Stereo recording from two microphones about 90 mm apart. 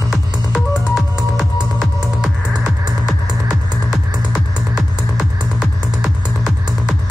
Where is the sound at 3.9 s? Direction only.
10° right (ahead or behind).